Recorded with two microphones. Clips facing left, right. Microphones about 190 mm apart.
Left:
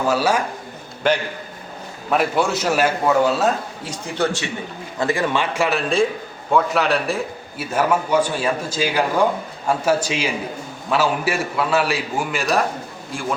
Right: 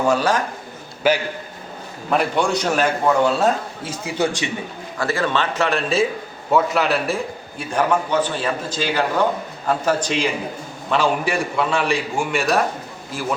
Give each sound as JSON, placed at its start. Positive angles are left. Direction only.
{"t": 0.1, "sound": "a man's voice", "side_deg": 10}
{"t": 1.0, "sound": "a man's voice", "side_deg": -5}
{"t": 4.9, "sound": "a man's voice", "side_deg": 15}